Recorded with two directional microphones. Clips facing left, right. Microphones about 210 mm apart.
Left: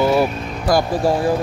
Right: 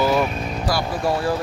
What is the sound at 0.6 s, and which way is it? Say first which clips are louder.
Speech: left 8 dB; 45° left (ahead or behind).